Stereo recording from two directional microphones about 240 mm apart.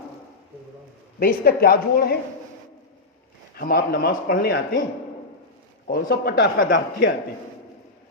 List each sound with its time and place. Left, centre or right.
1.2 s a man's voice: left
3.5 s a man's voice: left
5.9 s a man's voice: left